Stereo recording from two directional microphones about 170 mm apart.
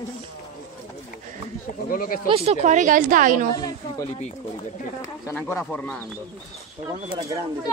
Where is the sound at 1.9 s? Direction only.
55° left (ahead or behind).